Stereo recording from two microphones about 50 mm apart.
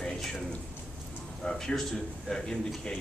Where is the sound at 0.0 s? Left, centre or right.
Centre.